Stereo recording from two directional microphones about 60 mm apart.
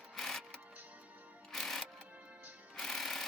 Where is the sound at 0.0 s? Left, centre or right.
Centre.